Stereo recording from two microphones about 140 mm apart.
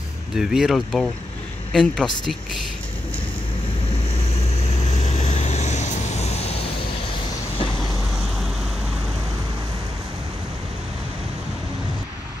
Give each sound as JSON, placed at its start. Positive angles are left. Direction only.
{"t": 0.4, "sound": "speech", "side_deg": -5}
{"t": 4.4, "sound": "vehicle", "side_deg": 50}